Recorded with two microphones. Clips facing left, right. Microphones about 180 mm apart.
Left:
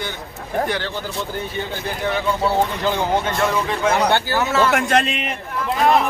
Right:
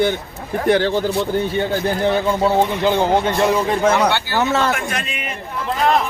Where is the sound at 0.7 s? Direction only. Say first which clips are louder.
Right 10 dB; 55° right (ahead or behind).